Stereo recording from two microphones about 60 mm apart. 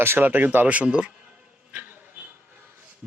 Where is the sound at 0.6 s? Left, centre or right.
Right.